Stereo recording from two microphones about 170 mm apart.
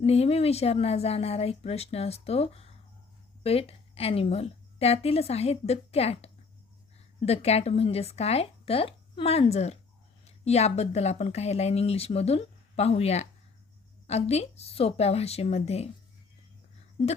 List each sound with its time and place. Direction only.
0.0 s speech: 35° left (ahead or behind)